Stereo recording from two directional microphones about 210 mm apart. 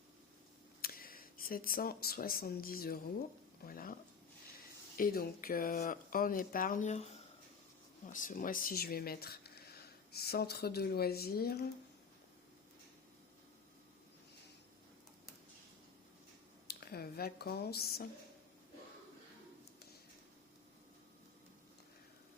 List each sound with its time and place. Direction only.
0.8 s speech: 45° left (ahead or behind)
4.9 s speech: 45° left (ahead or behind)
16.6 s speech: 50° left (ahead or behind)